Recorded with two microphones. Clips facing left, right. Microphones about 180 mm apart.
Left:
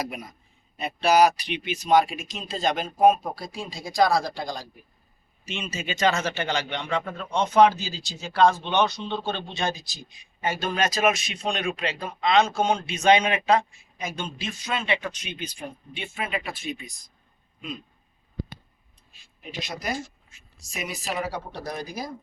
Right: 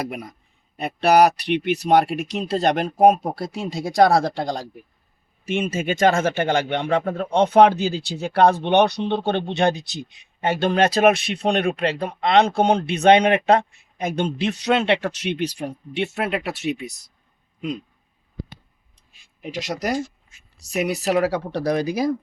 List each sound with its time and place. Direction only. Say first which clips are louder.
0.0 s speech: right 4 dB; 60° right (ahead or behind)
5.5 s speech: right 10 dB; 50° right (ahead or behind); by 17.0 s 70° right (ahead or behind)
19.4 s speech: right 8 dB; 85° right